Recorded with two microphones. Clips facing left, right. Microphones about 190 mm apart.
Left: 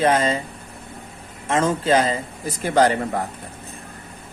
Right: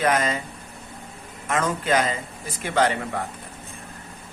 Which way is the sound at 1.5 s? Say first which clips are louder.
Left 4 dB; 30° left (ahead or behind).